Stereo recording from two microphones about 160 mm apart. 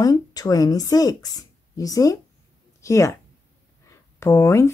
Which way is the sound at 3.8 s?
20° left (ahead or behind).